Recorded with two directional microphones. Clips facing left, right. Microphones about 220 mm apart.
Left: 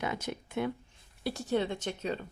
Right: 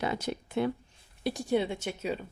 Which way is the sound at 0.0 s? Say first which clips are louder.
Right 3 dB; 35° right (ahead or behind).